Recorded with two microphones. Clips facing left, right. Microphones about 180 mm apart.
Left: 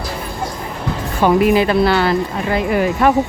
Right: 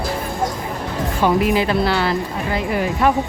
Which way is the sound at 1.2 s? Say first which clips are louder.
Left 4 dB; 55° left (ahead or behind).